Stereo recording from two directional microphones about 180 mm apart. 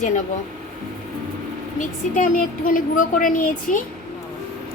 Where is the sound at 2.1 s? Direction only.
50° left (ahead or behind).